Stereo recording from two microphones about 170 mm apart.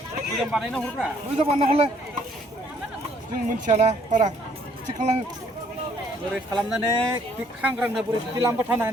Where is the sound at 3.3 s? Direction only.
45° right (ahead or behind).